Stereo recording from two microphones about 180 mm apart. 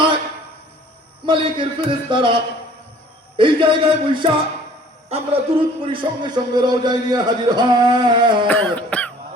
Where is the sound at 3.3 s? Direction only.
25° right (ahead or behind).